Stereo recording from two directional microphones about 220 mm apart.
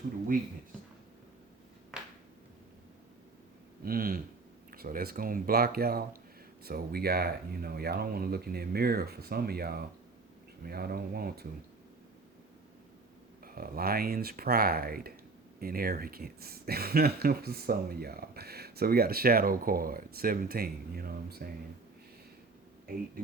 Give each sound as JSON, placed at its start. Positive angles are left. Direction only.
{"t": 1.9, "sound": "a sound", "side_deg": -5}
{"t": 3.8, "sound": "speech", "side_deg": -40}
{"t": 13.4, "sound": "speech", "side_deg": -40}